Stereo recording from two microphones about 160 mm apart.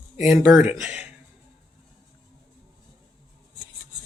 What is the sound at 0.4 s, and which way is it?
Speech, 5° right (ahead or behind).